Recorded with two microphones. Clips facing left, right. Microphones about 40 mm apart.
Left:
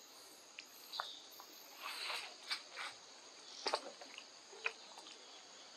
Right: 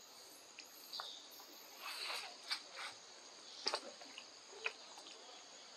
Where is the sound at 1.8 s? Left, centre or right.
Centre.